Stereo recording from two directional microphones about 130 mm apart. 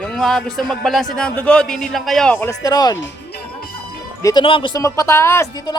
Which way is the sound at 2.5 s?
30° left (ahead or behind).